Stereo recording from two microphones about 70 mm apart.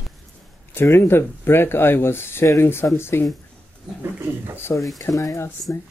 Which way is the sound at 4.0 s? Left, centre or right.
Right.